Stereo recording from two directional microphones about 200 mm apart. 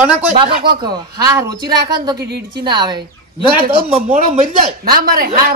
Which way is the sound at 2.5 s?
20° right (ahead or behind).